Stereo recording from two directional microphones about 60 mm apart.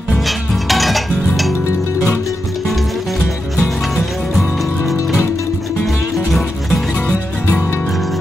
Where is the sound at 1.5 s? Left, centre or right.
Left.